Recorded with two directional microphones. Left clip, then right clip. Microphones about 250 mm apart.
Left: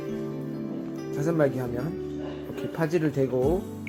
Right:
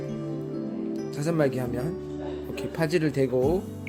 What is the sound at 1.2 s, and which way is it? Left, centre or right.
Speech, centre.